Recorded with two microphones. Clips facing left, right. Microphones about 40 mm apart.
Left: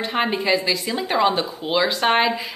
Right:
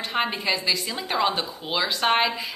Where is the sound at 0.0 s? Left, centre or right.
Centre.